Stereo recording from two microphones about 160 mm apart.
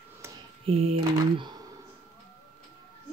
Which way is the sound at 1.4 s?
25° right (ahead or behind).